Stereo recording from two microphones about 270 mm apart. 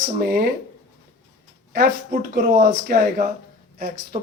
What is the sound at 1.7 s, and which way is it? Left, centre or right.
Speech, right.